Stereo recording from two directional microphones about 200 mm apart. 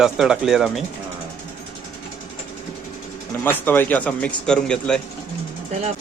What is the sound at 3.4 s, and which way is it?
Speech, 10° left (ahead or behind).